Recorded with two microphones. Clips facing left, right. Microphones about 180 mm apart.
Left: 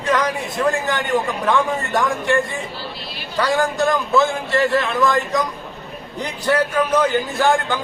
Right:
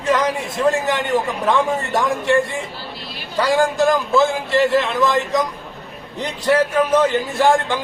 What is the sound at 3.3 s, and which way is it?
A man's voice, 25° right (ahead or behind).